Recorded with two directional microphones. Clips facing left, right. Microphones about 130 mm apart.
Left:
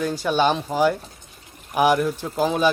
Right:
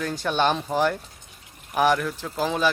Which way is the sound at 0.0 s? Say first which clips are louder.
Left 3 dB; 5° left (ahead or behind).